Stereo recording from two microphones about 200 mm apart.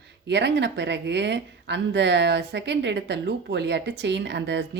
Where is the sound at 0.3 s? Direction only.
60° right (ahead or behind).